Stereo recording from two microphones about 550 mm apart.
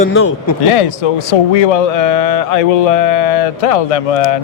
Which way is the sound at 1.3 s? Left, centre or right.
Left.